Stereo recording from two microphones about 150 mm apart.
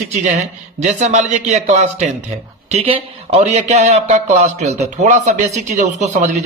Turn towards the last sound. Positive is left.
turn(degrees=-55)  # may be behind; listen again after turning